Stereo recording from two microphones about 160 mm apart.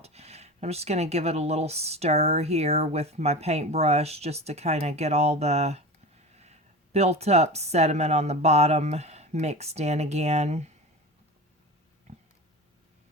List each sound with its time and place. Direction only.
0.0 s speech: 40° right (ahead or behind)